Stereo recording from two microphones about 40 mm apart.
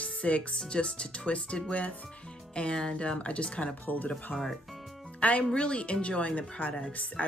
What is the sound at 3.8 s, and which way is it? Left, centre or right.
Speech, left.